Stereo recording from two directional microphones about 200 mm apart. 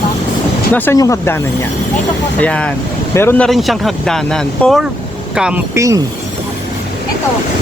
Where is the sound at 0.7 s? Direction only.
10° left (ahead or behind).